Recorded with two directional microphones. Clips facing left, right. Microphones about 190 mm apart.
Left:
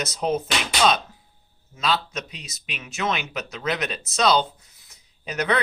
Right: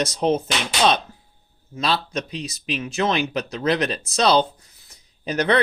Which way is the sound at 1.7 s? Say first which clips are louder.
Right 2 dB; 30° right (ahead or behind).